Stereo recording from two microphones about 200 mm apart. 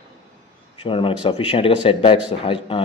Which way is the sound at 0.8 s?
25° left (ahead or behind).